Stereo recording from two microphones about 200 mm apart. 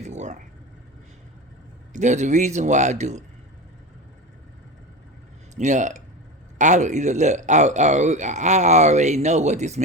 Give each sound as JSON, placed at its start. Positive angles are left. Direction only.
{"t": 0.0, "sound": "a sound", "side_deg": -35}
{"t": 1.9, "sound": "speech", "side_deg": -35}
{"t": 5.5, "sound": "speech", "side_deg": -35}